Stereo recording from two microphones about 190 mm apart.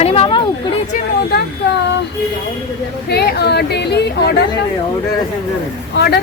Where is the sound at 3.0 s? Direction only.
60° left (ahead or behind).